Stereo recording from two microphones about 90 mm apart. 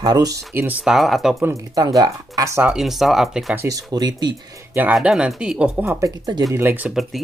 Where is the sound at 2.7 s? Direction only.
5° right (ahead or behind).